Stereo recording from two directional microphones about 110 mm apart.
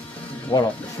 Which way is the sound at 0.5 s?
45° left (ahead or behind).